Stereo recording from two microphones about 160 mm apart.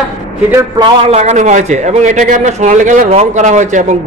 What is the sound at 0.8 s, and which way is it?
A man's voice, 40° right (ahead or behind).